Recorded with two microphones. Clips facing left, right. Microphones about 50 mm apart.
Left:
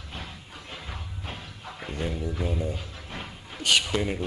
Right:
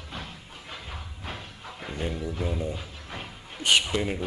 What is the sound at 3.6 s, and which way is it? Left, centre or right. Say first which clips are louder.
Speech: right 1 dB; centre.